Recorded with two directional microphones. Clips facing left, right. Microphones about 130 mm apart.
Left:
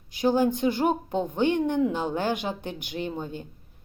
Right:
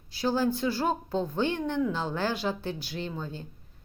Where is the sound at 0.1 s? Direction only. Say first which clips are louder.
Left 4 dB; 15° left (ahead or behind).